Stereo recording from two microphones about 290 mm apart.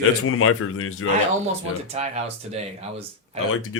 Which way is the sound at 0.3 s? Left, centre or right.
Left.